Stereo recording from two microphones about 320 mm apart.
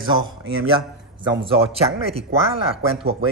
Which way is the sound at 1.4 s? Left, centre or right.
Centre.